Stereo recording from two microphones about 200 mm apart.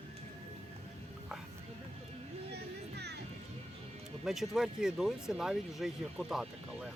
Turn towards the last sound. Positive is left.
turn(degrees=0)  # may be behind; listen again after turning